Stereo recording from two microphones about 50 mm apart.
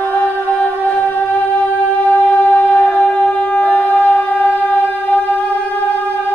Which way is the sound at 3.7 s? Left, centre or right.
Left.